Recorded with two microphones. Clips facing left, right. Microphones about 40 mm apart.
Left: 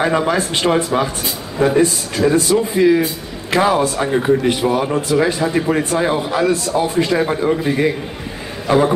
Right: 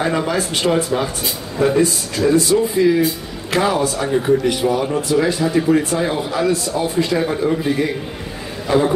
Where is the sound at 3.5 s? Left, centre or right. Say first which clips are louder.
Left 2 dB; left.